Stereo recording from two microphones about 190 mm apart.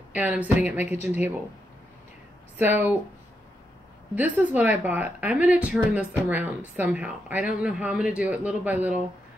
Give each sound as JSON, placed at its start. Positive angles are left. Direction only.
{"t": 0.1, "sound": "speech", "side_deg": -10}
{"t": 2.5, "sound": "speech", "side_deg": -10}
{"t": 4.1, "sound": "speech", "side_deg": -10}